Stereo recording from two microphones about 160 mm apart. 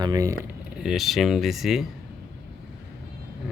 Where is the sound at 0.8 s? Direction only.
Centre (ahead or behind).